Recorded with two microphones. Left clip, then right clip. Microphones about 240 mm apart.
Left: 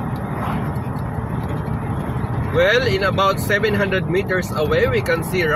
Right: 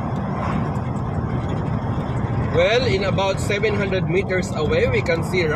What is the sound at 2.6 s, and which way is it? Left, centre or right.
Speech, left.